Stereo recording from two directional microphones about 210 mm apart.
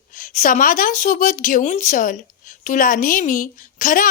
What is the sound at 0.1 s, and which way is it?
A woman's voice, 40° left (ahead or behind).